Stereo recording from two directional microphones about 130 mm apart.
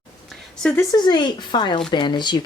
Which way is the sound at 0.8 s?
30° left (ahead or behind).